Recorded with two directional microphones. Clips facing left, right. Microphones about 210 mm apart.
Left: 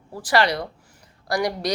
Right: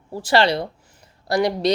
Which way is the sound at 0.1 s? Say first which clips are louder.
Right 3 dB; 25° right (ahead or behind).